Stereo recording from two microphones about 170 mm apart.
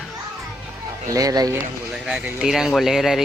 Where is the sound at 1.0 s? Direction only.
20° right (ahead or behind).